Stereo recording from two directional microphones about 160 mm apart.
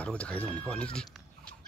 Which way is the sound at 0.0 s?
10° left (ahead or behind).